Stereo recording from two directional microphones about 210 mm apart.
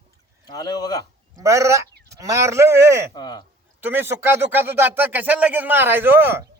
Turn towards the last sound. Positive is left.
turn(degrees=-10)  # may be behind; listen again after turning